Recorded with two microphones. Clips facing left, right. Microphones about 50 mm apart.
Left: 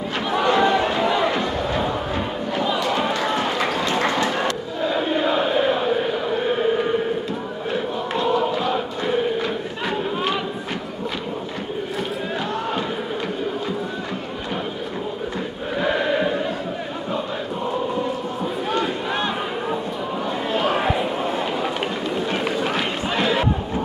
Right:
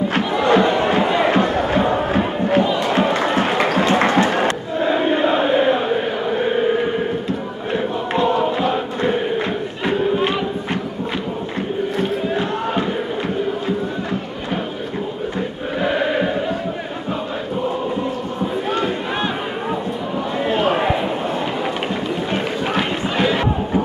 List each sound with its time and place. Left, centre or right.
0.5 s music: right
3.1 s crowd: right
8.1 s chant: right
9.8 s a sound: right
15.8 s choir: centre
18.7 s a sound: centre
22.3 s run: centre